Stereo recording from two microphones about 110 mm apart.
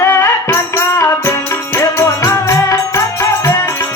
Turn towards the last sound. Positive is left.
turn(degrees=25)  # may be behind; listen again after turning